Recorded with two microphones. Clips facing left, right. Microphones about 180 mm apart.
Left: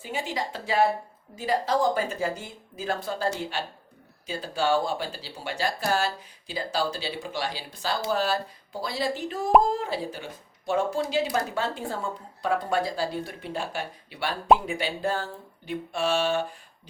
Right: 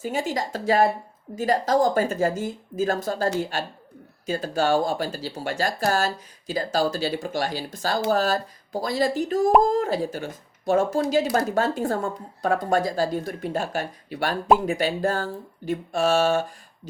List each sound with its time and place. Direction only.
0.0 s speech: 45° right (ahead or behind)